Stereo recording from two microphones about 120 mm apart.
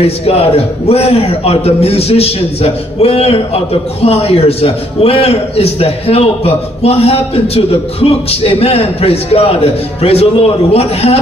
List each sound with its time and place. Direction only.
0.0 s a man's voice: 55° left (ahead or behind)